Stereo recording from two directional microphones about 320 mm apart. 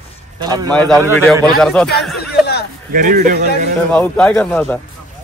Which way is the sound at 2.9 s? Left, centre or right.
Right.